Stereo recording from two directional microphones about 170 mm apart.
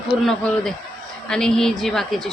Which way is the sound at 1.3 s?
5° left (ahead or behind).